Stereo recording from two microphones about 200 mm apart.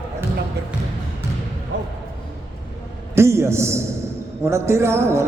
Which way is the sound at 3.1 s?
15° right (ahead or behind).